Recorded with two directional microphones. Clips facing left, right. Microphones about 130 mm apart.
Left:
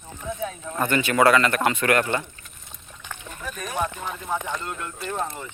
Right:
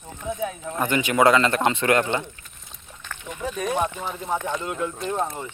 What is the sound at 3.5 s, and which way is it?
Speech, 20° right (ahead or behind).